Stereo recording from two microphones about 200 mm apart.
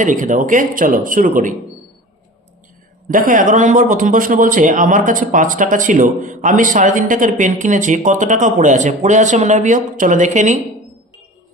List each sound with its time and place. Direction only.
0.0 s a man's voice: 40° right (ahead or behind)
3.1 s a man's voice: 40° right (ahead or behind)